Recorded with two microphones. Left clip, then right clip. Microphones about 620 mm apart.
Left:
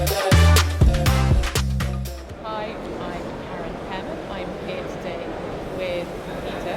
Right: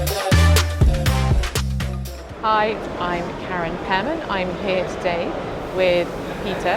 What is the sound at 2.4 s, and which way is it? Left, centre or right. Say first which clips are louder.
Music: right 11 dB; right.